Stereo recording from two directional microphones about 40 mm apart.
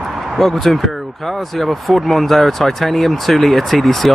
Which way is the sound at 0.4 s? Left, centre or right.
Centre.